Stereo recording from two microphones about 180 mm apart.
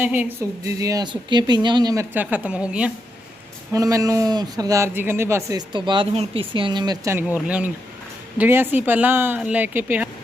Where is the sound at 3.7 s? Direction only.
20° right (ahead or behind).